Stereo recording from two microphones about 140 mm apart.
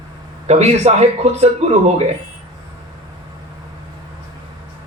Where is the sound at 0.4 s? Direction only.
50° right (ahead or behind).